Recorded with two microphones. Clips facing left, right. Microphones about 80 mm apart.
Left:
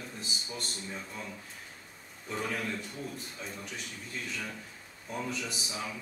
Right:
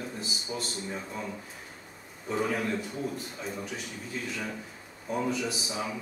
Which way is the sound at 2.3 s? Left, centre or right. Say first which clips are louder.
Right 6 dB; centre.